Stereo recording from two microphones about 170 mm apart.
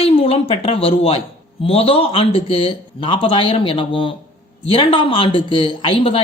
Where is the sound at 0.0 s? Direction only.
35° left (ahead or behind).